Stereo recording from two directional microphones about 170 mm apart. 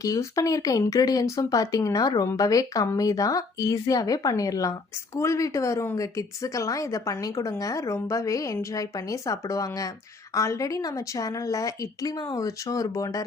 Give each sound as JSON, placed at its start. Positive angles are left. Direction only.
{"t": 0.0, "sound": "speech", "side_deg": 20}